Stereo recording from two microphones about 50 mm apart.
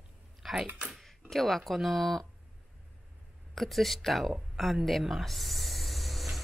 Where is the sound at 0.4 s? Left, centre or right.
Centre.